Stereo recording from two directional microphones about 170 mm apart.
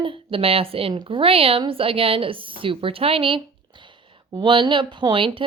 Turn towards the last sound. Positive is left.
turn(degrees=-30)  # may be behind; listen again after turning